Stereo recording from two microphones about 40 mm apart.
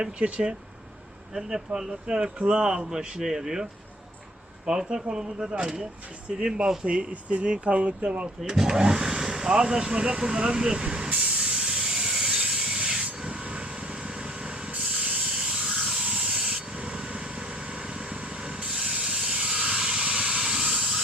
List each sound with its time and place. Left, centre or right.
0.0 s speech: right
1.3 s speech: centre
5.1 s speech: right
7.1 s speech: right
8.4 s speech: centre
11.1 s steam: right
11.5 s rub: centre
13.2 s vehicle: right
14.8 s train: right
15.1 s a sound: right
15.8 s hiss: right
18.9 s vehicle: right
20.1 s a sound: right